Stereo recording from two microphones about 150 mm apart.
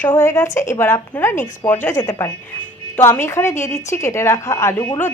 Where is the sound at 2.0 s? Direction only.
25° left (ahead or behind).